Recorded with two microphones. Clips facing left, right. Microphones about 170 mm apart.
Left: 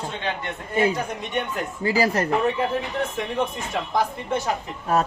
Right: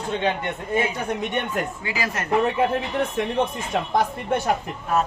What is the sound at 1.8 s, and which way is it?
Speech, 35° left (ahead or behind).